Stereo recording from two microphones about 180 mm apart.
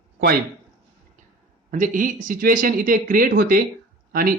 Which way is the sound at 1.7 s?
45° right (ahead or behind).